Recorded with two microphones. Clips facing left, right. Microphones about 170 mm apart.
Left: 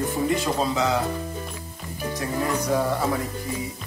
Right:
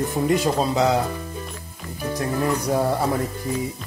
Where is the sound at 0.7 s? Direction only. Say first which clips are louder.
Right 5 dB; 40° right (ahead or behind).